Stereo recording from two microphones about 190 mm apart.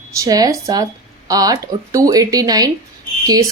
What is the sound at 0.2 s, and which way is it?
Speech, 20° right (ahead or behind).